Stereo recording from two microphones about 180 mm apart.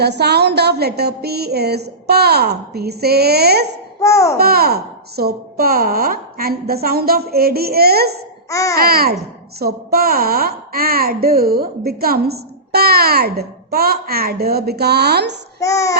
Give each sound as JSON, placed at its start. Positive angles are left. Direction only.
{"t": 0.0, "sound": "a woman's voice", "side_deg": -65}
{"t": 4.0, "sound": "a child's voice", "side_deg": 15}
{"t": 4.4, "sound": "a woman's voice", "side_deg": -60}
{"t": 8.4, "sound": "speech", "side_deg": 15}
{"t": 8.7, "sound": "a woman's voice", "side_deg": -55}
{"t": 15.6, "sound": "speech", "side_deg": 15}